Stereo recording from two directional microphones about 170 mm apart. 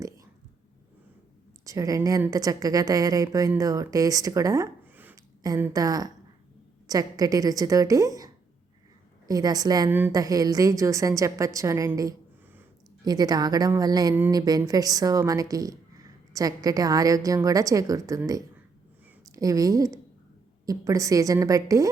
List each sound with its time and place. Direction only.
1.6 s a woman's voice: 20° right (ahead or behind)